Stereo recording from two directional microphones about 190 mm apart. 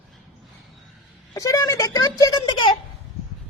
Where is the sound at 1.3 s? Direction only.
15° left (ahead or behind).